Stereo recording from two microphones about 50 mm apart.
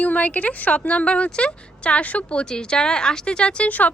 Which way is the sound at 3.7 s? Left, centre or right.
Left.